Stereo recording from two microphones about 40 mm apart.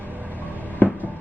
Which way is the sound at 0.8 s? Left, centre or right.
Left.